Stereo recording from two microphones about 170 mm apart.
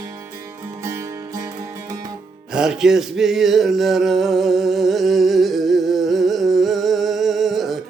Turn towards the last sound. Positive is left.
turn(degrees=0)  # may be behind; listen again after turning